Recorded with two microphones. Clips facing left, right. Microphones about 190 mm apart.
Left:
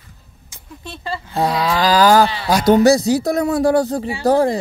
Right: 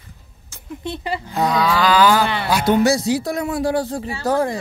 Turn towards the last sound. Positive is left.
turn(degrees=35)  # may be behind; listen again after turning